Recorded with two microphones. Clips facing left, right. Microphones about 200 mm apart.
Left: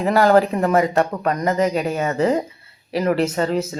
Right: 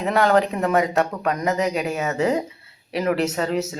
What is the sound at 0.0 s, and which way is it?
Speech, centre (ahead or behind).